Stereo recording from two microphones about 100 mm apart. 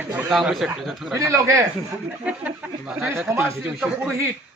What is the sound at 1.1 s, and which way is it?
Speech, 30° right (ahead or behind).